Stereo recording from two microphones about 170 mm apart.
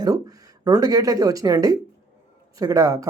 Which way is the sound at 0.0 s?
20° right (ahead or behind).